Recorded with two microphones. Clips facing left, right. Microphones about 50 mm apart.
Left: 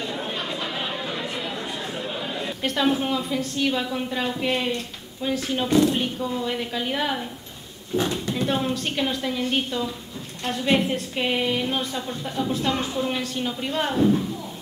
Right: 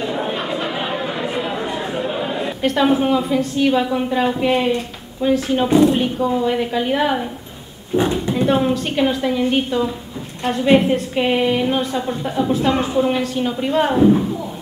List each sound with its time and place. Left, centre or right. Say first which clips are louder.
0.0 s chatter: right 7 dB; centre
2.6 s a woman's voice: right 7 dB; centre
7.9 s a sound: right 7 dB; centre
8.5 s a woman's voice: right 8 dB; centre